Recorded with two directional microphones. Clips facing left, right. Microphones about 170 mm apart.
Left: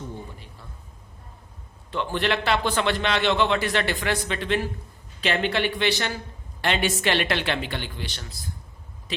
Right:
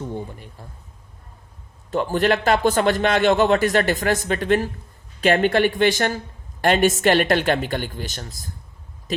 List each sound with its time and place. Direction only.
1.9 s a man's voice: 45° right (ahead or behind)